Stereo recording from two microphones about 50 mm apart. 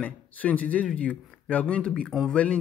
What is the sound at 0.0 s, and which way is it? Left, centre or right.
Speech, left.